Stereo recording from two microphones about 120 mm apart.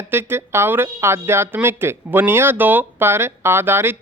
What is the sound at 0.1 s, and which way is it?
Speech, 20° right (ahead or behind).